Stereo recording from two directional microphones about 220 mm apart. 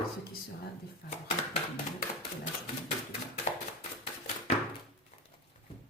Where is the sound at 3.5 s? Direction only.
35° left (ahead or behind).